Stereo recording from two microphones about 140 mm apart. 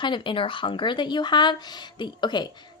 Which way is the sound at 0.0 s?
35° left (ahead or behind).